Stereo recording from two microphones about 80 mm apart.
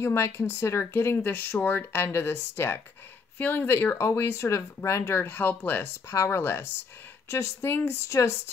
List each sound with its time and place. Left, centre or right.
0.0 s speech: left
3.3 s speech: centre
3.6 s speech: left
8.1 s speech: left